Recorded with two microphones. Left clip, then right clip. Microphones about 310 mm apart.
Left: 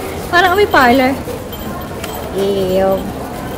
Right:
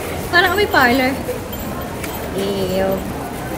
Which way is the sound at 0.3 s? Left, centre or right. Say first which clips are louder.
Left 4 dB; centre.